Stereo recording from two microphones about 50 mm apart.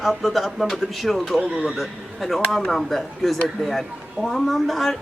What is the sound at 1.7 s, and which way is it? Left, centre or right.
Speech, centre.